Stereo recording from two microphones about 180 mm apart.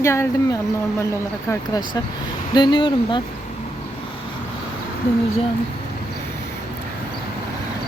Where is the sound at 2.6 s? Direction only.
25° left (ahead or behind).